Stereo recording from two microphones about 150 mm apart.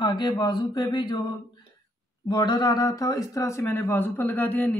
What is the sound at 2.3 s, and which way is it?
Speech, 30° left (ahead or behind).